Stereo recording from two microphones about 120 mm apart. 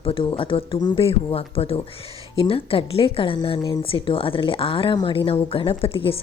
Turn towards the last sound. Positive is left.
turn(degrees=50)  # may be behind; listen again after turning